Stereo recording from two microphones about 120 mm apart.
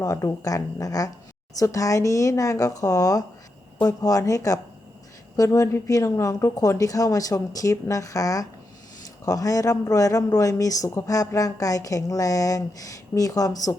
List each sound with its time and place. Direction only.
0.0 s speech: 25° left (ahead or behind)